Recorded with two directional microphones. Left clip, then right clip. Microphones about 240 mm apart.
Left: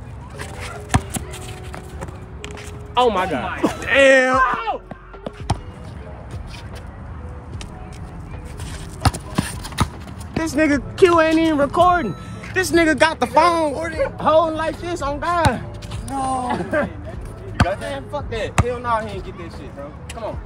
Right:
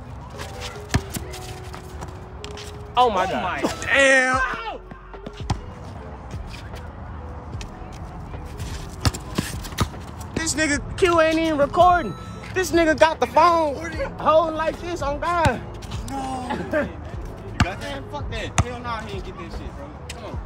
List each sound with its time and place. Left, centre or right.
2.9 s speech: left
3.5 s speech: centre
4.5 s a sound: centre
9.0 s clip-clop: centre
10.4 s a sound: centre
11.0 s speech: left
13.7 s speech: centre
14.2 s speech: left
16.1 s speech: centre